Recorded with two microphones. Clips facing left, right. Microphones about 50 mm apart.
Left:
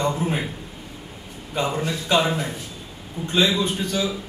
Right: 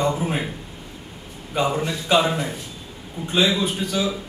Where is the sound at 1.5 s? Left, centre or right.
Centre.